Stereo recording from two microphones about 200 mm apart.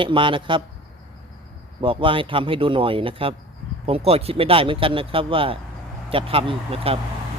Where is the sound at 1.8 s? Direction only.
25° right (ahead or behind).